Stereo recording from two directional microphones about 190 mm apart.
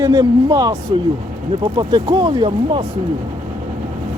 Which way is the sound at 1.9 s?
20° right (ahead or behind).